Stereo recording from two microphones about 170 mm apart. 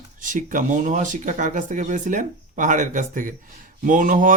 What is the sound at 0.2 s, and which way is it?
Speech, 50° right (ahead or behind).